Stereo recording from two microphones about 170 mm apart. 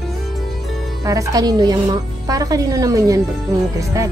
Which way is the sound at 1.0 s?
20° right (ahead or behind).